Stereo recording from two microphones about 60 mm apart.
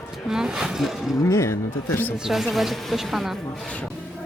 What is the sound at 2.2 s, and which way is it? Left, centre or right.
Speech, centre.